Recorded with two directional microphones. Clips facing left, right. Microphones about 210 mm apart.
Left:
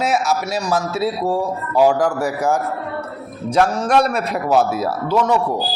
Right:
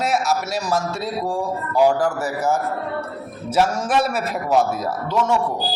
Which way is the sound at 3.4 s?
5° right (ahead or behind).